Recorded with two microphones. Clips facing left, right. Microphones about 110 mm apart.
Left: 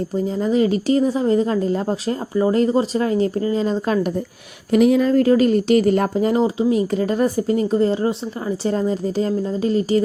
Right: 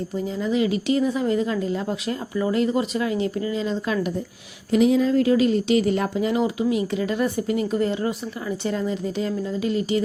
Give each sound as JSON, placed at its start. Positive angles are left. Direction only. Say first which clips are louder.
{"t": 0.3, "sound": "speech", "louder": "left 4 dB", "side_deg": 40}
{"t": 4.7, "sound": "speech", "louder": "left 3 dB", "side_deg": 55}